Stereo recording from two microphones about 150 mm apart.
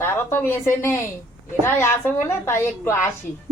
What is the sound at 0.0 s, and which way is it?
A woman's voice, 15° left (ahead or behind).